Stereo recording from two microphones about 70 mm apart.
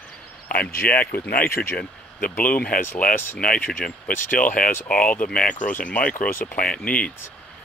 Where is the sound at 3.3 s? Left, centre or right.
Centre.